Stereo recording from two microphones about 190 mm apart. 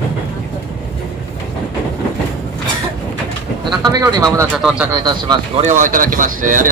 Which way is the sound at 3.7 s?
20° right (ahead or behind).